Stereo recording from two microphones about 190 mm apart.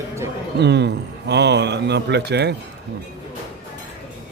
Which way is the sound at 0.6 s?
60° right (ahead or behind).